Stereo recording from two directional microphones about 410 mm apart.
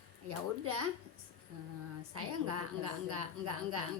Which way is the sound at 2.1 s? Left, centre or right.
Right.